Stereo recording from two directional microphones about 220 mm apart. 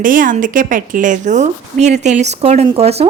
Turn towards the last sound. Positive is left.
turn(degrees=-30)  # may be behind; listen again after turning